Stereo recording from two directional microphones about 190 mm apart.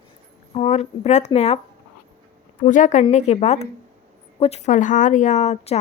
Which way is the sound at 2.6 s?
40° left (ahead or behind).